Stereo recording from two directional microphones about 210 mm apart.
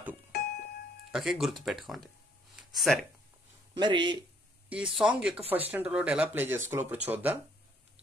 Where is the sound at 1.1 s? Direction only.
Centre (ahead or behind).